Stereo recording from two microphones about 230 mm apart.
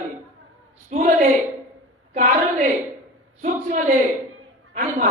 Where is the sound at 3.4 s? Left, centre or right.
Right.